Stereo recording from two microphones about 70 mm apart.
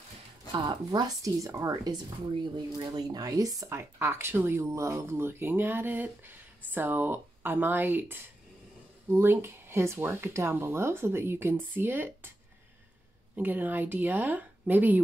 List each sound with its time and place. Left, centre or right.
0.6 s speech: right
2.5 s speech: right
3.7 s speech: right
13.4 s speech: right